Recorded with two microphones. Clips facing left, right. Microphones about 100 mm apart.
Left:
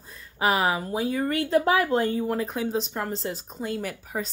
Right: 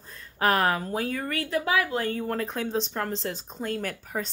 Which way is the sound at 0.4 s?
5° left (ahead or behind).